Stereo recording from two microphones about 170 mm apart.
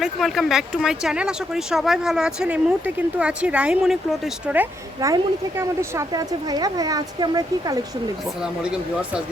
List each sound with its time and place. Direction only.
0.0 s speech: centre (ahead or behind)
4.9 s speech: 20° right (ahead or behind)
8.4 s speech: 5° right (ahead or behind)